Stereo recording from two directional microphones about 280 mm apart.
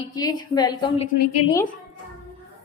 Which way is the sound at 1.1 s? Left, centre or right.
Left.